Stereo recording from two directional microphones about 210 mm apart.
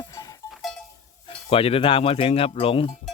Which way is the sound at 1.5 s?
25° left (ahead or behind).